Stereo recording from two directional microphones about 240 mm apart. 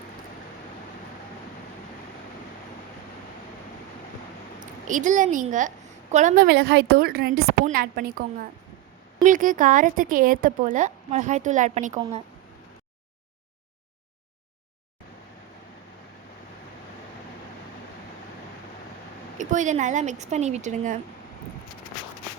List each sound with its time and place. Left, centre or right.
4.9 s a woman's voice: right
19.4 s speech: right